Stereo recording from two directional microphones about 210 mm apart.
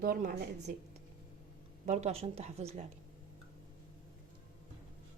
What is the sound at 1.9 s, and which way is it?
Speech, 35° right (ahead or behind).